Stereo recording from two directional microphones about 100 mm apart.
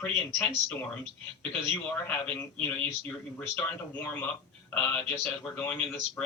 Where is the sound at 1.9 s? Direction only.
15° left (ahead or behind).